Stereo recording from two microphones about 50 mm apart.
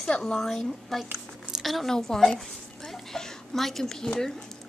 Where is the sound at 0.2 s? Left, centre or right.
Centre.